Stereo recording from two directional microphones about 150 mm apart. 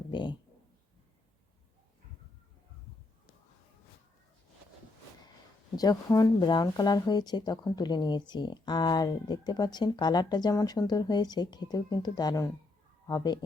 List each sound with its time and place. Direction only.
0.1 s speech: 30° left (ahead or behind)
5.7 s speech: 25° left (ahead or behind)